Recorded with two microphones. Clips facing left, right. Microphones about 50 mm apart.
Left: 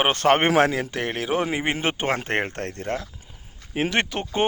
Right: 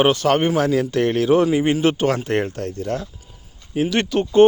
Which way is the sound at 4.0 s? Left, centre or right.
Left.